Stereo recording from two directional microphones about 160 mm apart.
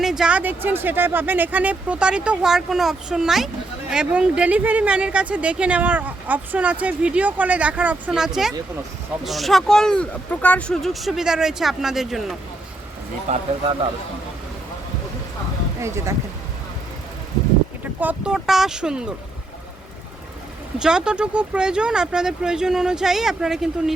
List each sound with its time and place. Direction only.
0.0 s speech: 5° right (ahead or behind)
13.2 s speech: 45° right (ahead or behind)
18.0 s speech: 5° right (ahead or behind)
20.7 s speech: 5° right (ahead or behind)